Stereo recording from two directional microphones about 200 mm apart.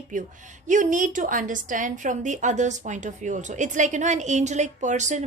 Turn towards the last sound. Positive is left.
turn(degrees=-35)  # may be behind; listen again after turning